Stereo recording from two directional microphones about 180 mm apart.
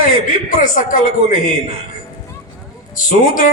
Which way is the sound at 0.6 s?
45° left (ahead or behind).